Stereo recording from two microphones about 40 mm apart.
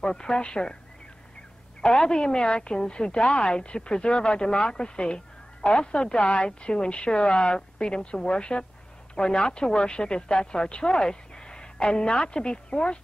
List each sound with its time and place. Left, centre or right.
0.0 s a woman's voice: left
1.8 s a woman's voice: centre